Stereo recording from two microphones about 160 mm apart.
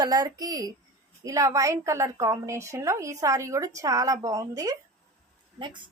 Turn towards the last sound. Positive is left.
turn(degrees=-30)  # may be behind; listen again after turning